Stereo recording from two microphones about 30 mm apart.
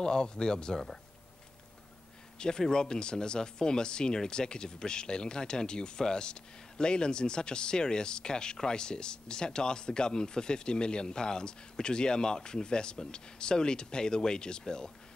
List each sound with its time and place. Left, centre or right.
0.0 s speech: left
2.3 s speech: left